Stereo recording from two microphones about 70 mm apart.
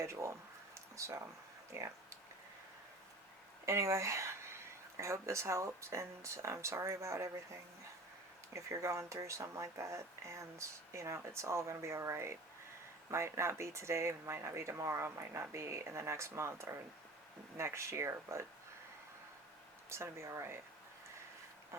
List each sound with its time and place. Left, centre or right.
0.0 s a sound: right
1.7 s speech: right
3.7 s speech: right
19.9 s speech: right